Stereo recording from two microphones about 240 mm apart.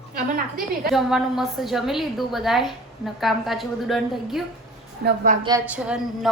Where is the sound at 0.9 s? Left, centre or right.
Centre.